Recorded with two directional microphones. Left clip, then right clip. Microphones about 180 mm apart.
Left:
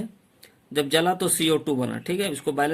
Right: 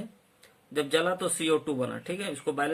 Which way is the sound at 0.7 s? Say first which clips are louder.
Left 5 dB; 45° left (ahead or behind).